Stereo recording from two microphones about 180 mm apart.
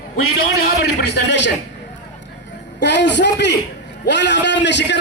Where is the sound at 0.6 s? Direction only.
70° left (ahead or behind).